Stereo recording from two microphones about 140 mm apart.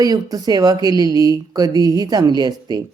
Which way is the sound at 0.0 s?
25° right (ahead or behind).